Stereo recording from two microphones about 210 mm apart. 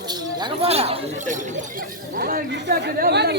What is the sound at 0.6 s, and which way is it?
Speech, 30° right (ahead or behind).